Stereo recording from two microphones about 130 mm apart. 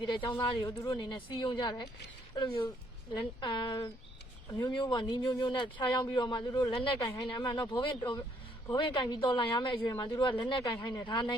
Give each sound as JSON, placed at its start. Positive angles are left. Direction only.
{"t": 0.0, "sound": "speech", "side_deg": 35}